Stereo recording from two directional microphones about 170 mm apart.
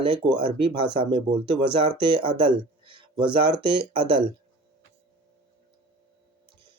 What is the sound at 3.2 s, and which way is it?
Speech, 30° right (ahead or behind).